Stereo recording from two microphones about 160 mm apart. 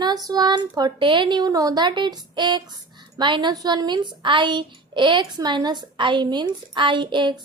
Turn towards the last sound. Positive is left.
turn(degrees=-30)  # may be behind; listen again after turning